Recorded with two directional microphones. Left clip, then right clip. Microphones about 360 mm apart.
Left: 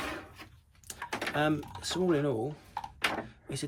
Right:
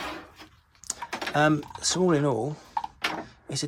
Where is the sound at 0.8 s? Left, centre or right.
Centre.